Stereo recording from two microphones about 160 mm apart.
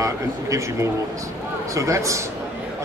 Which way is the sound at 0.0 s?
20° right (ahead or behind).